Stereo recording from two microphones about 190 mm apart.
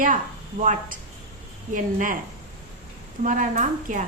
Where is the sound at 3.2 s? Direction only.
40° right (ahead or behind).